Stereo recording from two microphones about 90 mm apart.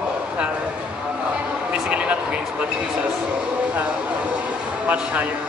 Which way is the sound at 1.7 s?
10° right (ahead or behind).